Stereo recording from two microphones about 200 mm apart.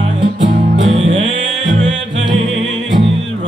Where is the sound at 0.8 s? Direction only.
70° right (ahead or behind).